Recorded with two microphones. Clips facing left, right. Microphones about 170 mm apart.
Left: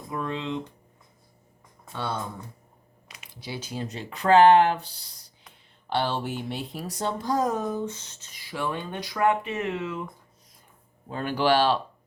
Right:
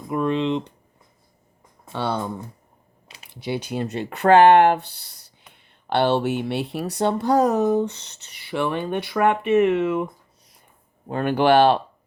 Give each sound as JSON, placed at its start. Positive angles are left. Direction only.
{"t": 0.1, "sound": "speech", "side_deg": -70}
{"t": 1.9, "sound": "speech", "side_deg": -70}
{"t": 3.4, "sound": "speech", "side_deg": -65}
{"t": 11.1, "sound": "speech", "side_deg": -60}